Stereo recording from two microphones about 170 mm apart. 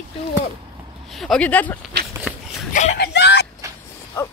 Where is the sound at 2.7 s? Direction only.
45° left (ahead or behind).